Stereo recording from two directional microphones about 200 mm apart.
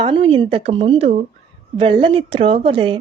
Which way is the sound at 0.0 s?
25° right (ahead or behind).